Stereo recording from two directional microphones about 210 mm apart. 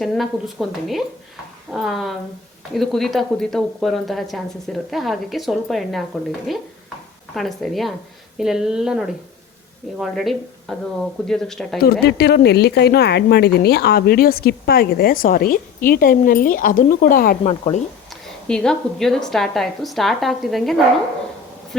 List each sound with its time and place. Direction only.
0.0 s a woman's voice: centre (ahead or behind)
11.8 s a woman's voice: 50° left (ahead or behind); by 17.8 s 30° left (ahead or behind)
18.1 s a woman's voice: 5° left (ahead or behind)